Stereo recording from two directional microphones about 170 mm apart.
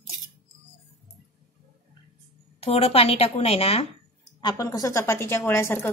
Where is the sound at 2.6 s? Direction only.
35° left (ahead or behind).